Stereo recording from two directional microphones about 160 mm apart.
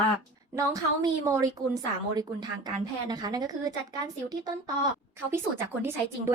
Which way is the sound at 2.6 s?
25° right (ahead or behind).